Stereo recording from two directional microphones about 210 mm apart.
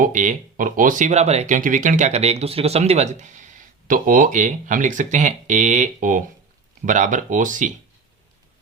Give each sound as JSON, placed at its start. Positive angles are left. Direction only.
{"t": 0.0, "sound": "speech", "side_deg": -35}